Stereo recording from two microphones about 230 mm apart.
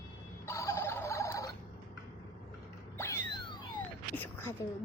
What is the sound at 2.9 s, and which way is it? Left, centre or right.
Mechanisms, centre.